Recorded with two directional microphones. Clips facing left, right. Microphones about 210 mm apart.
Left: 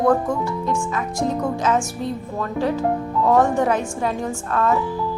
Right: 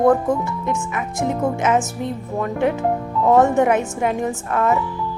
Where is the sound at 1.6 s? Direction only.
20° right (ahead or behind).